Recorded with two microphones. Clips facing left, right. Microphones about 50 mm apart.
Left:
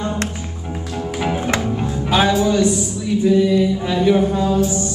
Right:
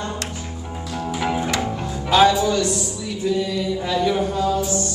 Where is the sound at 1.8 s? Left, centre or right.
Centre.